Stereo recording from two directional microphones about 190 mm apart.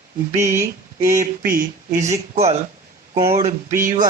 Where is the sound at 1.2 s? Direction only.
50° right (ahead or behind).